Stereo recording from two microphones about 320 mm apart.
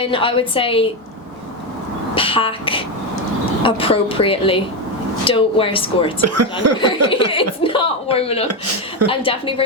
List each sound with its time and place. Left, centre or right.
0.0 s a woman's voice: centre
2.1 s a woman's voice: centre
6.2 s speech: right
6.7 s a woman's voice: centre
8.4 s speech: right
9.0 s a woman's voice: centre